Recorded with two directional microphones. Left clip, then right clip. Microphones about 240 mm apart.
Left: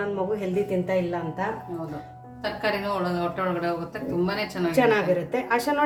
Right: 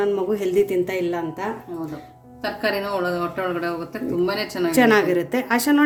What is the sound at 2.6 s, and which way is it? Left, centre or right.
Speech, centre.